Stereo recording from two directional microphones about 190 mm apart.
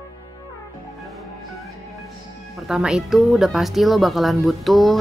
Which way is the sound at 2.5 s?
5° right (ahead or behind).